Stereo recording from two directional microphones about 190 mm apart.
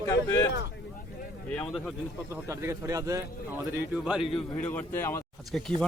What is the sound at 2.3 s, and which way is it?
Speech, 15° right (ahead or behind).